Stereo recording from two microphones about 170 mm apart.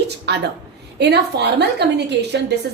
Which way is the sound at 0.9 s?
75° right (ahead or behind).